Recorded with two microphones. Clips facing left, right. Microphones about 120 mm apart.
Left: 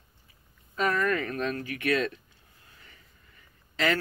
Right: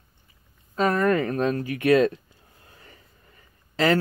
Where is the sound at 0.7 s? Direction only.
30° right (ahead or behind).